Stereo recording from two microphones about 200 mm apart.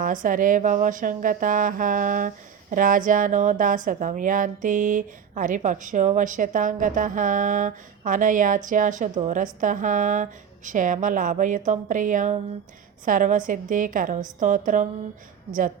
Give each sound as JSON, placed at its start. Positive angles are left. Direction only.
{"t": 0.0, "sound": "speech", "side_deg": -40}